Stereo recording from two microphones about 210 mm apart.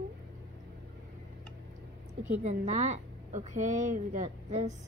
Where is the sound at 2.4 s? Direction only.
35° right (ahead or behind).